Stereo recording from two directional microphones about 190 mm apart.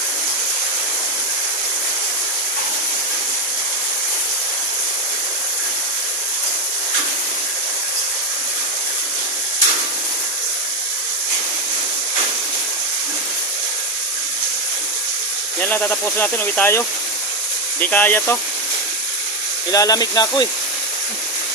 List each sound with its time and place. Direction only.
15.6 s speech: 10° left (ahead or behind)
19.7 s speech: 20° left (ahead or behind)